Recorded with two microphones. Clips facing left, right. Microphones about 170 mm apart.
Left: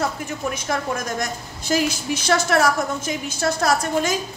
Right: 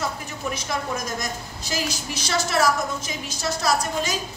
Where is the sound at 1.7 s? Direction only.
55° left (ahead or behind).